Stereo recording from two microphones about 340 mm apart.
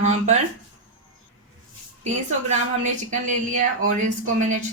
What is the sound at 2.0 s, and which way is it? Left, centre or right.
Speech, right.